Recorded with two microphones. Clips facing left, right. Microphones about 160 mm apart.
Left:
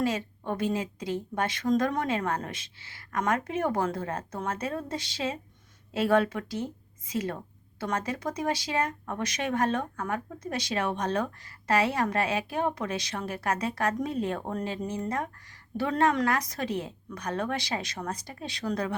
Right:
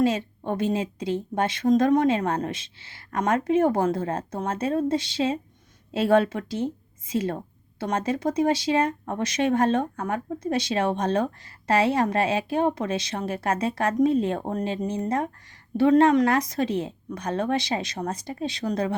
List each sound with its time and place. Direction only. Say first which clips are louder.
0.0 s speech: right 6 dB; 25° right (ahead or behind)